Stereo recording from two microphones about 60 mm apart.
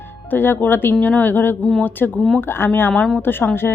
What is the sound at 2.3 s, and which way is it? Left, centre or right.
Speech, left.